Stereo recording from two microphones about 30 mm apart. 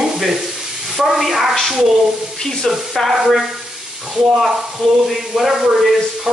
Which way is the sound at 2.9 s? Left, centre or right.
Centre.